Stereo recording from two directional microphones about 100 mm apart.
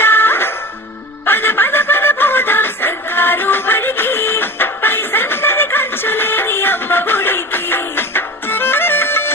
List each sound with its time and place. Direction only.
0.0 s music: 20° left (ahead or behind)